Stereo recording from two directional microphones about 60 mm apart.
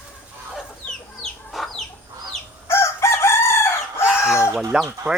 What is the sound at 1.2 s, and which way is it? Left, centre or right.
Chicken, centre.